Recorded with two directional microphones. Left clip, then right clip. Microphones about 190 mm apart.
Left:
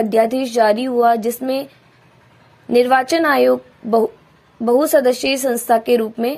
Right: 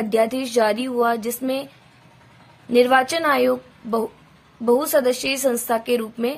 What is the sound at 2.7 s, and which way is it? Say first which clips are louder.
Speech: left 3 dB; 30° left (ahead or behind).